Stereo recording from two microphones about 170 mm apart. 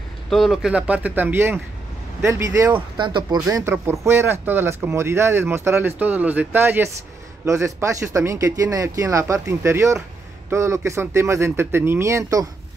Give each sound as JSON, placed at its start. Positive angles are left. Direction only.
{"t": 0.3, "sound": "speech", "side_deg": 0}
{"t": 3.0, "sound": "speech", "side_deg": -25}
{"t": 3.5, "sound": "speech", "side_deg": -15}